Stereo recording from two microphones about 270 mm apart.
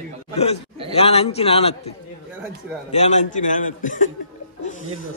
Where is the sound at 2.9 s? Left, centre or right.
Left.